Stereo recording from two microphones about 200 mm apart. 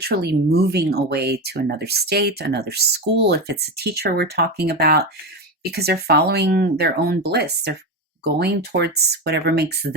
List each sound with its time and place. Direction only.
0.0 s speech: 55° right (ahead or behind)